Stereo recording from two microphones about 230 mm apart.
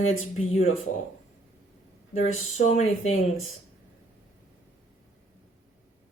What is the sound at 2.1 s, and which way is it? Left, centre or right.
Speech, left.